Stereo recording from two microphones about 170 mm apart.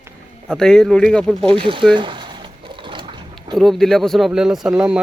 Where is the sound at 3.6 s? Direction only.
Centre (ahead or behind).